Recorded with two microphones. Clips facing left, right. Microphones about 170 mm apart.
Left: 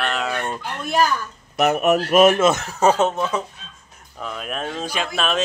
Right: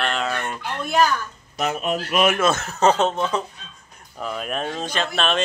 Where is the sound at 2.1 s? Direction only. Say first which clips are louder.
Left 6 dB; 40° left (ahead or behind).